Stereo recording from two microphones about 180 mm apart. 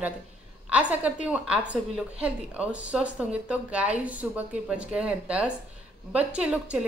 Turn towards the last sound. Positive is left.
turn(degrees=-5)  # may be behind; listen again after turning